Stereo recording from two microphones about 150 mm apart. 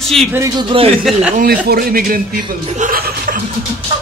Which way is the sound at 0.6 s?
35° right (ahead or behind).